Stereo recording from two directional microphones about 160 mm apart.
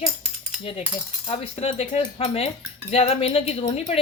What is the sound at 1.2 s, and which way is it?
Speech, 35° left (ahead or behind).